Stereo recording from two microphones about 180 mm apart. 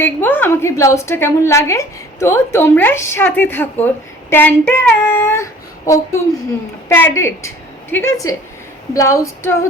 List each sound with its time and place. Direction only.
0.0 s a woman's voice: 10° left (ahead or behind)